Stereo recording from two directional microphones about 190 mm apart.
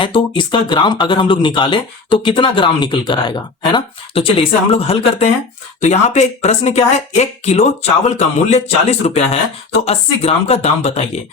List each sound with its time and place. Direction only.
0.0 s speech: 25° left (ahead or behind)